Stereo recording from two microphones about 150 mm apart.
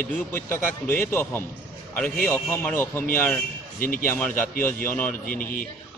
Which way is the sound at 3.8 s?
65° left (ahead or behind).